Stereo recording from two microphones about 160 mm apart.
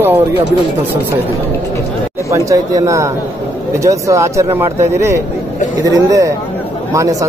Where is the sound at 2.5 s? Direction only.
20° right (ahead or behind).